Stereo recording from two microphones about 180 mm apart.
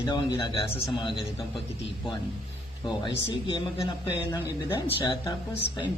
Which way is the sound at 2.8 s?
25° left (ahead or behind).